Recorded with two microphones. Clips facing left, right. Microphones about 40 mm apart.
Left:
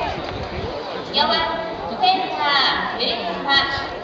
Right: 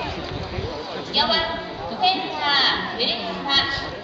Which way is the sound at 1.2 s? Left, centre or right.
Left.